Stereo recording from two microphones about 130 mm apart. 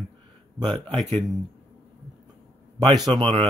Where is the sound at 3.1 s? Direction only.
40° right (ahead or behind).